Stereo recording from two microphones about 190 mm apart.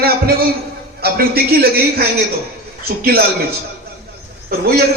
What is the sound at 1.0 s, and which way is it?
A man's voice, 55° right (ahead or behind).